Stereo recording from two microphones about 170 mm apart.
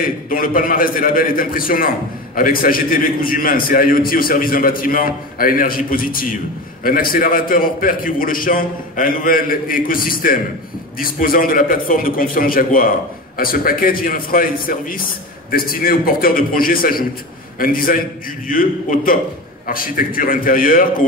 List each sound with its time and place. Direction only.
0.0 s a man's voice: 55° left (ahead or behind)